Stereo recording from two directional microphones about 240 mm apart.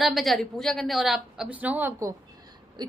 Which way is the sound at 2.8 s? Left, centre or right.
Centre.